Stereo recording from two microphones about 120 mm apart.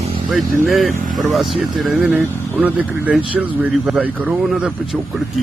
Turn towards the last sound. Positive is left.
turn(degrees=-5)  # may be behind; listen again after turning